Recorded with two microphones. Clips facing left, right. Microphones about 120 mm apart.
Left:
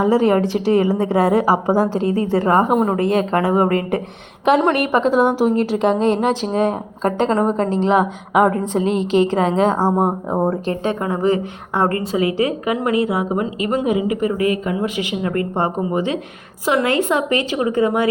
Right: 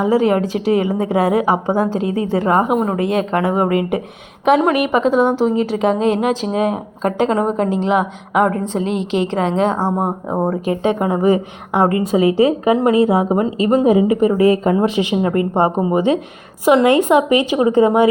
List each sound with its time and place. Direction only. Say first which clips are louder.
0.0 s a woman's voice: even; centre (ahead or behind)
10.7 s a woman's voice: right 4 dB; 20° right (ahead or behind)